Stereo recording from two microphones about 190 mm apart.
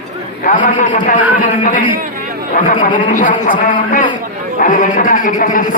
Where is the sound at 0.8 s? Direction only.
40° left (ahead or behind).